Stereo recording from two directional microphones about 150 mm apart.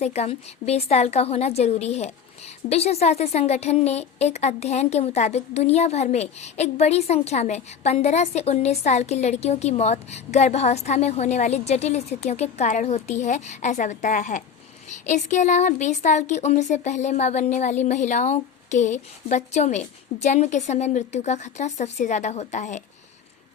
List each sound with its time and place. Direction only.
0.0 s a woman's voice: 45° left (ahead or behind)